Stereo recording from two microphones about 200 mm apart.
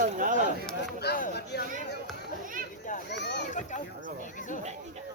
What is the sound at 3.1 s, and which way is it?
Children playing, 60° left (ahead or behind).